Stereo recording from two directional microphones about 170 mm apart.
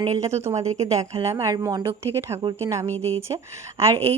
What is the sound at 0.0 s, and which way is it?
A woman's voice, 20° right (ahead or behind).